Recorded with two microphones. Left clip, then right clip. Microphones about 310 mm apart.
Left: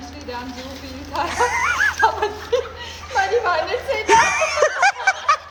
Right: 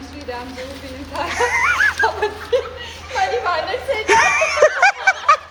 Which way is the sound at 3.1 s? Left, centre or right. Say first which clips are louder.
Left 1 dB; left.